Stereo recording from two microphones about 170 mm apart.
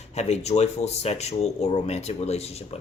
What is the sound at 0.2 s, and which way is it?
Speech, 40° left (ahead or behind).